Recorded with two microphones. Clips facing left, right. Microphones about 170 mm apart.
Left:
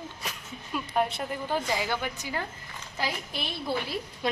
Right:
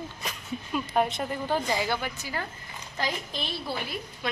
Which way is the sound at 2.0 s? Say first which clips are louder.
Left 1 dB; 15° left (ahead or behind).